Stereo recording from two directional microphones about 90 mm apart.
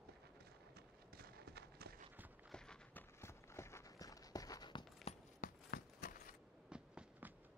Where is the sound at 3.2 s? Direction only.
30° left (ahead or behind).